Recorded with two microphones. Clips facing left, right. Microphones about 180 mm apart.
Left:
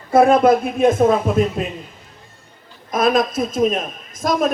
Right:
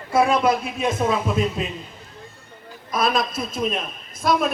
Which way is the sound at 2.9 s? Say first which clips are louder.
Left 5 dB; 45° left (ahead or behind).